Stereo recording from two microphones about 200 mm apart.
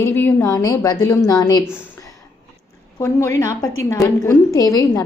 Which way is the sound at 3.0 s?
15° left (ahead or behind).